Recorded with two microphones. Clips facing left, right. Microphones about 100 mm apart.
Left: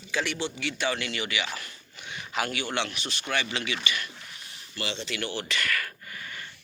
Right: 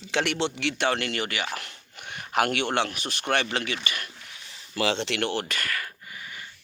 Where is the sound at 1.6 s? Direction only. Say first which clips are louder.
Right 2 dB; 60° right (ahead or behind); by 4.1 s 45° right (ahead or behind).